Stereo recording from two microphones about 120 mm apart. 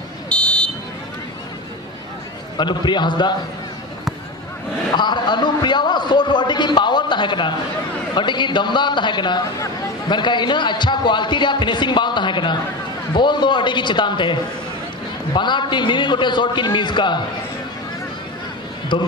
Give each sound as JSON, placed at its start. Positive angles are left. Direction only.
{"t": 0.3, "sound": "car alarm", "side_deg": 10}
{"t": 2.5, "sound": "a man's voice", "side_deg": 40}
{"t": 4.9, "sound": "a sound", "side_deg": 40}
{"t": 8.1, "sound": "a man's voice", "side_deg": 40}
{"t": 18.9, "sound": "a man's voice", "side_deg": 40}